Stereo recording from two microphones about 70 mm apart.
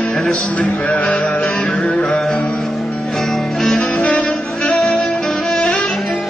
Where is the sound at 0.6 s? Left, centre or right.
Centre.